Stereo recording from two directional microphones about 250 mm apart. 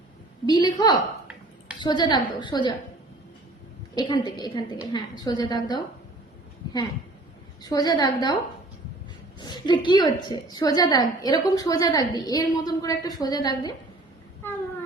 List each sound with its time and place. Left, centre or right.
0.4 s a woman's voice: centre
3.9 s a woman's voice: centre
7.6 s a woman's voice: centre
9.4 s a woman's voice: centre
14.4 s a sound: centre